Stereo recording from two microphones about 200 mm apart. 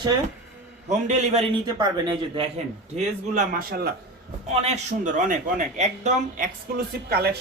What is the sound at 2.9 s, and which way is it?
Speech, 40° right (ahead or behind).